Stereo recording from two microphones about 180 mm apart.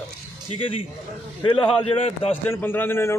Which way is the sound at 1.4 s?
25° left (ahead or behind).